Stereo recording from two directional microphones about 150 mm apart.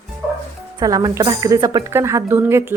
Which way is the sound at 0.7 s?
25° right (ahead or behind).